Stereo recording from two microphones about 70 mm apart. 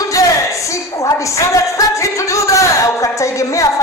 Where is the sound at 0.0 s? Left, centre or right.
Left.